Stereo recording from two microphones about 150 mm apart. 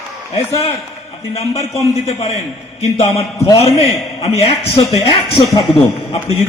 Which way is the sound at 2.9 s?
40° left (ahead or behind).